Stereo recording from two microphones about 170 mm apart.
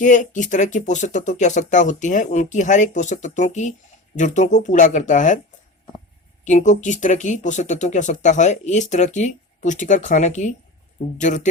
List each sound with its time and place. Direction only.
0.0 s speech: 50° left (ahead or behind)
6.4 s speech: 45° left (ahead or behind)